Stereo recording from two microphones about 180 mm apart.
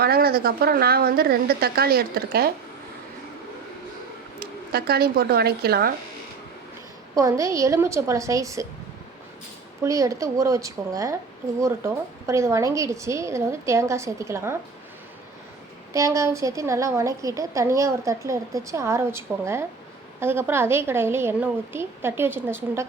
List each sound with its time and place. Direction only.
0.0 s a woman's voice: 60° right (ahead or behind)
4.4 s speech: 60° right (ahead or behind)
7.2 s a woman's voice: 15° right (ahead or behind)
9.8 s a woman's voice: 15° right (ahead or behind)
15.9 s a woman's voice: 15° right (ahead or behind)